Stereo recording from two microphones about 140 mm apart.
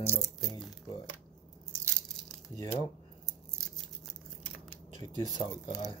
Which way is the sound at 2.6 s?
25° left (ahead or behind).